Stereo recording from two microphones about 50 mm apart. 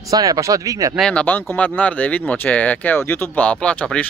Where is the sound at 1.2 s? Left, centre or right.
Left.